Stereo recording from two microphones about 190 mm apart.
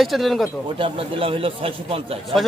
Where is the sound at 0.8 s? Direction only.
30° right (ahead or behind).